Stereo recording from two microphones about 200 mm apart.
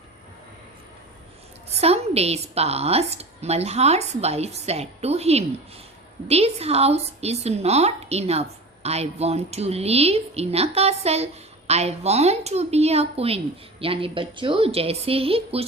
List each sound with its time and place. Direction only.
1.8 s a woman's voice: 30° right (ahead or behind)